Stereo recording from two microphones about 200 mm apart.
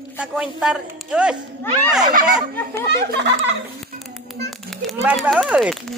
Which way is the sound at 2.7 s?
60° right (ahead or behind).